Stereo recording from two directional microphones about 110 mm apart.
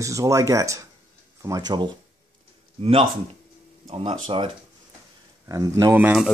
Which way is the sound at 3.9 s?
55° right (ahead or behind).